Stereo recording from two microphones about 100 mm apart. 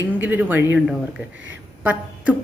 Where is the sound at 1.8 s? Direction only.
15° right (ahead or behind).